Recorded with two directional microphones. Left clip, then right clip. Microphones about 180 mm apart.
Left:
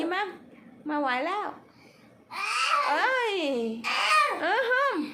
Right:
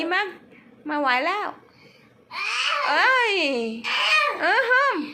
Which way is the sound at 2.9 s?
10° right (ahead or behind).